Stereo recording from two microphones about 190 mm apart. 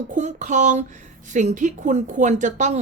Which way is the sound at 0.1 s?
40° right (ahead or behind).